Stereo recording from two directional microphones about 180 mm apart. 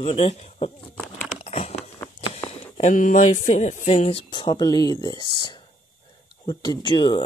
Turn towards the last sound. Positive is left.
turn(degrees=25)  # may be behind; listen again after turning